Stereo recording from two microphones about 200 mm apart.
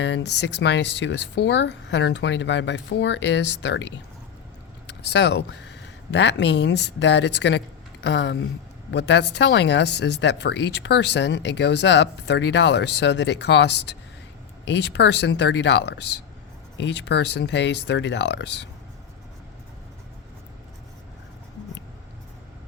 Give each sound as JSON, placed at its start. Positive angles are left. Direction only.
{"t": 0.0, "sound": "speech", "side_deg": 60}